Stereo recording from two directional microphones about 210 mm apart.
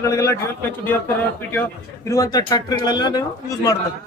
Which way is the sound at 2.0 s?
15° left (ahead or behind).